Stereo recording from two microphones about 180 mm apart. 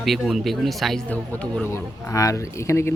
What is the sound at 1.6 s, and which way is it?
Speech, 15° left (ahead or behind).